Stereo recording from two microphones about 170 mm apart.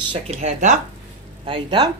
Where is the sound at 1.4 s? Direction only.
30° right (ahead or behind).